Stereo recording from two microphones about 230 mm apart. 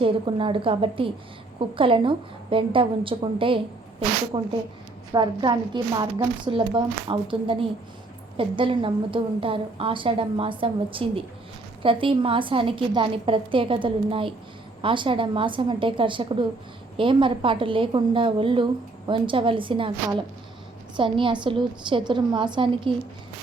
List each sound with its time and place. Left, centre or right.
0.0 s a woman's voice: right